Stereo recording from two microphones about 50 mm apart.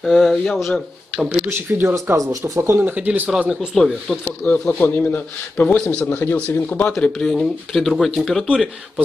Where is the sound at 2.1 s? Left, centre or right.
Right.